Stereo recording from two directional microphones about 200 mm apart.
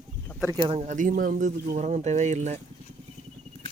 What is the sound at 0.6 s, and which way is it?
Speech, 25° right (ahead or behind).